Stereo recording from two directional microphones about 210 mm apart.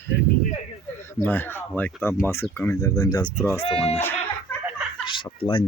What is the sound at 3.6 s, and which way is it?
Speech, 25° left (ahead or behind).